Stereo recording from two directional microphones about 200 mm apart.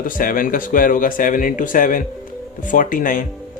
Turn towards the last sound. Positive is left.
turn(degrees=45)  # may be behind; listen again after turning